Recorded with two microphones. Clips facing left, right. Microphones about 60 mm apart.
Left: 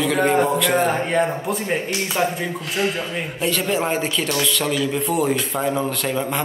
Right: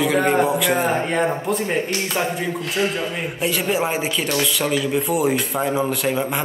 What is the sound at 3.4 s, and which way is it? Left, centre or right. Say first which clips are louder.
Speech: even; centre.